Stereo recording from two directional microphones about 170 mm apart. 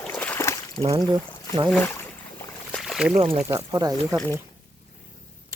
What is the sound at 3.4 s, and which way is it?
Speech, 20° right (ahead or behind).